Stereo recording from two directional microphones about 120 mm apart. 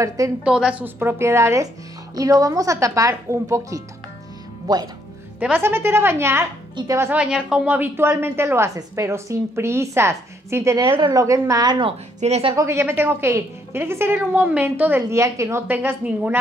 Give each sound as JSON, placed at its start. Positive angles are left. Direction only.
{"t": 0.4, "sound": "a woman's voice", "side_deg": -10}
{"t": 5.4, "sound": "a woman's voice", "side_deg": -15}
{"t": 7.1, "sound": "a woman's voice", "side_deg": -5}
{"t": 12.2, "sound": "a woman's voice", "side_deg": -65}
{"t": 12.5, "sound": "a woman's voice", "side_deg": -25}